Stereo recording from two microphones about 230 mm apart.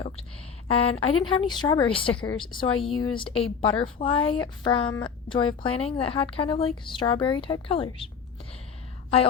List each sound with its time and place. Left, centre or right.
0.7 s a woman's voice: left